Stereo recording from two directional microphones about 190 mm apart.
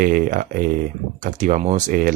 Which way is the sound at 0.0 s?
45° right (ahead or behind).